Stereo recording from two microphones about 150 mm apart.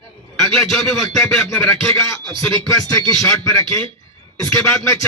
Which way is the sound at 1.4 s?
15° left (ahead or behind).